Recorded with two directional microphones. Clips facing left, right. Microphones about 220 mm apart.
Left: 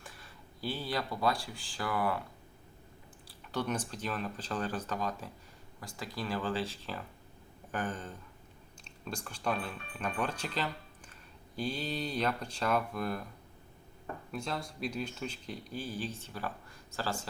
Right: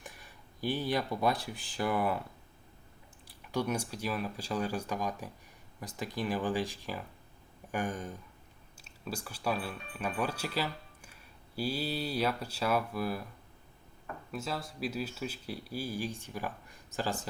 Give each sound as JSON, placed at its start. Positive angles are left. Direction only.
{"t": 0.0, "sound": "speech", "side_deg": -15}
{"t": 3.2, "sound": "speech", "side_deg": -10}
{"t": 14.3, "sound": "speech", "side_deg": -5}